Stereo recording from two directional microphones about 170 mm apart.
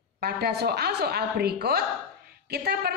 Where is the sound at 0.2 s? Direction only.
70° right (ahead or behind).